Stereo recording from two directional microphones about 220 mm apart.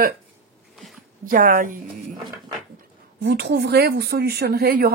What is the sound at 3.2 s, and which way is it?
Speech, 50° right (ahead or behind).